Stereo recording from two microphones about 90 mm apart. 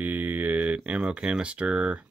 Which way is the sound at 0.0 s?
20° right (ahead or behind).